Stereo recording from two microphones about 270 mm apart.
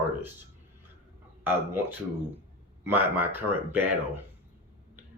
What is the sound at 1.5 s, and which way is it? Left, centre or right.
Speech, centre.